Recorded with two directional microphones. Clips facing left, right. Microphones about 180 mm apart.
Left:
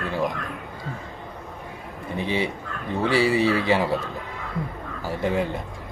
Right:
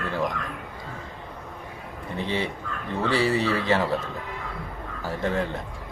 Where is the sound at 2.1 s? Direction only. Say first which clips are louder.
Left 2 dB; 15° left (ahead or behind).